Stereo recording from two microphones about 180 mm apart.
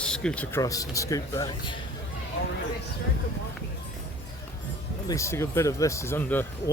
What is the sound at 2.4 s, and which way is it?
Speech, 80° left.